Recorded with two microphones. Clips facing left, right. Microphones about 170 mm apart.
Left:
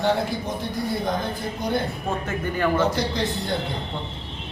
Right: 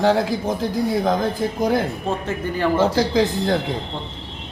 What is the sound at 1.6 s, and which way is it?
Speech, 90° right.